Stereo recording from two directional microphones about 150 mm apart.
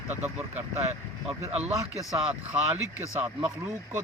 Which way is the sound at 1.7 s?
20° right (ahead or behind).